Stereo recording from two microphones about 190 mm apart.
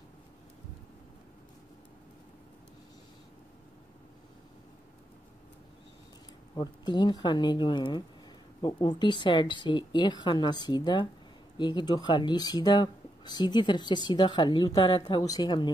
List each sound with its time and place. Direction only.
6.5 s speech: 20° left (ahead or behind)